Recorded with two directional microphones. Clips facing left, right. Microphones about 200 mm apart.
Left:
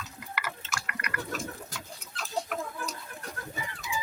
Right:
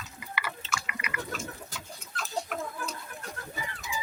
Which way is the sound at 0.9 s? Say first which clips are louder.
Left 1 dB; 5° right (ahead or behind).